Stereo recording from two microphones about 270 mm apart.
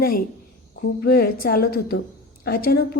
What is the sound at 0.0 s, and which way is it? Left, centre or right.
A woman's voice, left.